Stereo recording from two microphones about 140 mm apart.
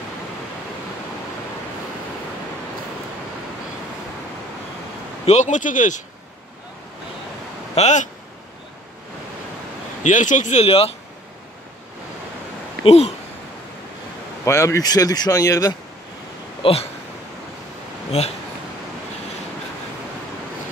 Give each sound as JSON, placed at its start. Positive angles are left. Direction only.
{"t": 5.2, "sound": "speech", "side_deg": 55}
{"t": 7.7, "sound": "speech", "side_deg": 55}
{"t": 10.0, "sound": "speech", "side_deg": 65}
{"t": 12.8, "sound": "speech", "side_deg": 45}
{"t": 14.4, "sound": "speech", "side_deg": 20}
{"t": 16.6, "sound": "speech", "side_deg": 40}